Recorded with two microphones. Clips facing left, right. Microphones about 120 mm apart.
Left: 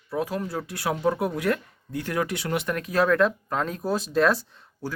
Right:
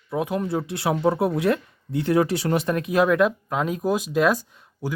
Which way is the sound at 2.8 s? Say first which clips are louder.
Right 1 dB; 15° right (ahead or behind).